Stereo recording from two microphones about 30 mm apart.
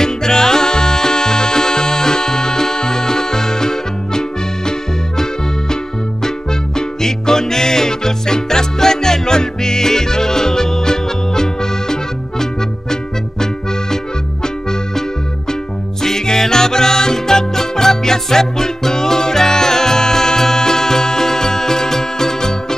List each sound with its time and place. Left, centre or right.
0.0 s music: centre
6.8 s music: centre